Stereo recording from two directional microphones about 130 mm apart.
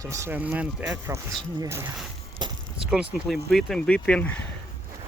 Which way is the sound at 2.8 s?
5° right (ahead or behind).